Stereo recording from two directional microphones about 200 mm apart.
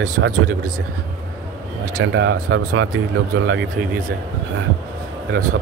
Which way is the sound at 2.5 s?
90° right.